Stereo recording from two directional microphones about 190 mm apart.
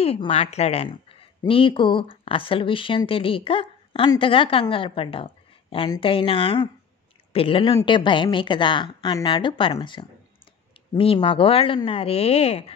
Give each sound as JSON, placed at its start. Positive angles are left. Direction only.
{"t": 0.0, "sound": "speech", "side_deg": 30}